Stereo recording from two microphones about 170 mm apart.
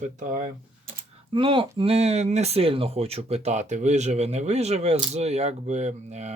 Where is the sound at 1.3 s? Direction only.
30° right (ahead or behind).